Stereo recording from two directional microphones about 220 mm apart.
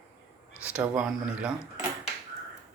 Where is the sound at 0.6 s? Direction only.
5° right (ahead or behind).